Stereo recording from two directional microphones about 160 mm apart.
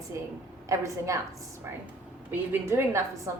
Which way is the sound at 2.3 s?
15° right (ahead or behind).